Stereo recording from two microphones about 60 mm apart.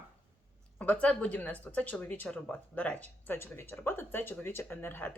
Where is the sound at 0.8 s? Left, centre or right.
Left.